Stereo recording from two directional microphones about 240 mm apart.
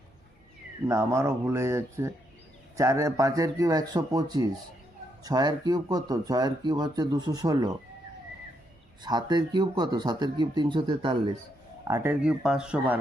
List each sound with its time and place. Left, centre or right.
0.9 s speech: centre
9.0 s speech: centre